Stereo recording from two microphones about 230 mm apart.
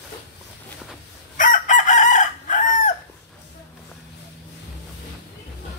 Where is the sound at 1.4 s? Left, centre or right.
Left.